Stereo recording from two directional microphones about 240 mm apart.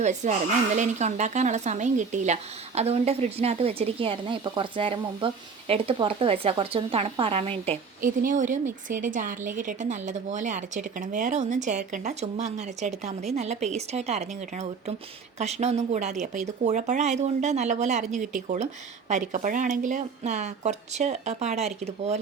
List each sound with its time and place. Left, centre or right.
0.0 s a woman's voice: right